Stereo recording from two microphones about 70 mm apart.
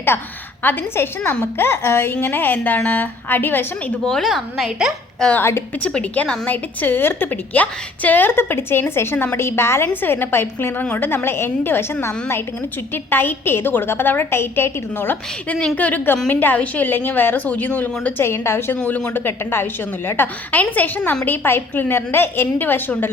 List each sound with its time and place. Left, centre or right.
0.1 s a woman's voice: left
4.0 s a woman's voice: centre
5.4 s a woman's voice: left
5.8 s a woman's voice: centre
18.2 s a woman's voice: left
18.8 s a woman's voice: centre
19.2 s a woman's voice: left